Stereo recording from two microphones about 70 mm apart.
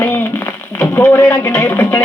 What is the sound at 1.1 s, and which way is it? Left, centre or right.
Speech, left.